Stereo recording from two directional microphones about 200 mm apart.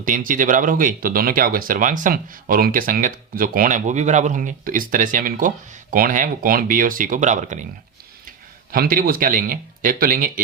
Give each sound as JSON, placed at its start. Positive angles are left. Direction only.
{"t": 0.0, "sound": "speech", "side_deg": -40}
{"t": 8.7, "sound": "speech", "side_deg": -45}